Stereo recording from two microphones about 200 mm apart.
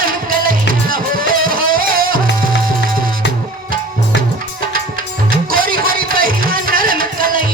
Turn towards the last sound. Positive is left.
turn(degrees=-45)  # may be behind; listen again after turning